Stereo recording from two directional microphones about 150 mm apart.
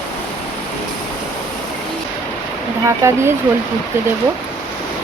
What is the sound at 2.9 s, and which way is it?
Speech, 20° right (ahead or behind).